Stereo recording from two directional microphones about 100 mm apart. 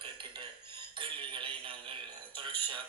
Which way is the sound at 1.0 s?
60° right (ahead or behind).